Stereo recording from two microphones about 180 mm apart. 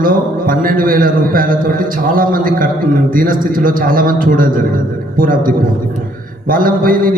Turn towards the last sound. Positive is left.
turn(degrees=-50)  # may be behind; listen again after turning